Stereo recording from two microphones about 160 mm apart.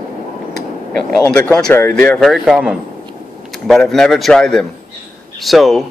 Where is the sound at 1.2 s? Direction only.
5° left (ahead or behind).